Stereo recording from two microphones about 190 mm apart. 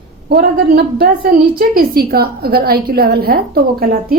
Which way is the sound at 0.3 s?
55° right (ahead or behind).